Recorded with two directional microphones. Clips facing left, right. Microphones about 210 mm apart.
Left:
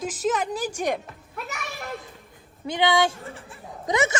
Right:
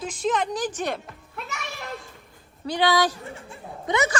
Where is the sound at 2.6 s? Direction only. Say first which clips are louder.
Right 1 dB; 20° left (ahead or behind).